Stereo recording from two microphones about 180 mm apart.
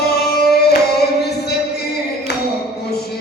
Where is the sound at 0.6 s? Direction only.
65° left (ahead or behind).